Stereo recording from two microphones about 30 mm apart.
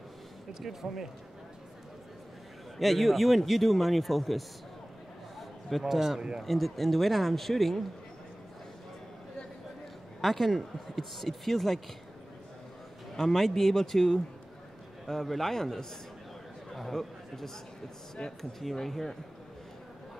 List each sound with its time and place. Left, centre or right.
0.6 s speech: centre
2.8 s a man's voice: centre
5.7 s a man's voice: centre
5.9 s speech: centre
6.4 s a man's voice: centre
10.2 s speech: centre
13.1 s speech: centre